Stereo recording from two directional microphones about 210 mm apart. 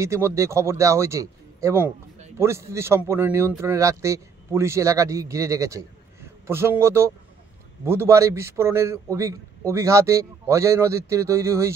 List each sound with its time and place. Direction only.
0.0 s a man's voice: 15° right (ahead or behind)